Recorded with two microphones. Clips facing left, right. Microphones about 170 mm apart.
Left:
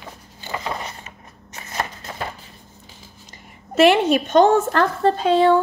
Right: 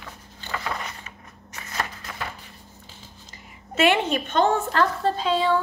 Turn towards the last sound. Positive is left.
turn(degrees=55)  # may be behind; listen again after turning